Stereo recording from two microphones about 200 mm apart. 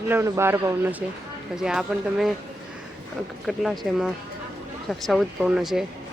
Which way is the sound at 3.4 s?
Centre (ahead or behind).